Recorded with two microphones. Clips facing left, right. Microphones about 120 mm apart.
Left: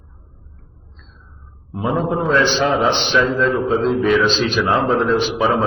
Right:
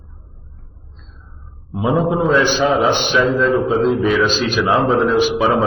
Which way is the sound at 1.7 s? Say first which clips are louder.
Right 3 dB; 10° right (ahead or behind).